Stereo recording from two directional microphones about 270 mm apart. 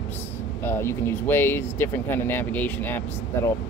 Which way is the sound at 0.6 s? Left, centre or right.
Centre.